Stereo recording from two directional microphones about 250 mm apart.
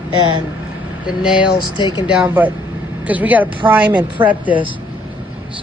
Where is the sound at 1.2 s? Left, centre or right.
Centre.